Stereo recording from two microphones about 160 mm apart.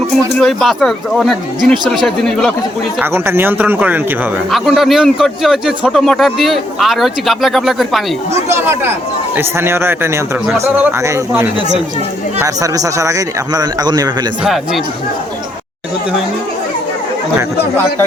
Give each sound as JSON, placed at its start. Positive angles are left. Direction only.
{"t": 0.3, "sound": "a man's voice", "side_deg": 0}
{"t": 3.0, "sound": "a man's voice", "side_deg": -15}
{"t": 8.6, "sound": "a man's voice", "side_deg": -15}